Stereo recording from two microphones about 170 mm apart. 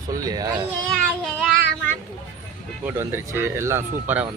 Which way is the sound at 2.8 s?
10° right (ahead or behind).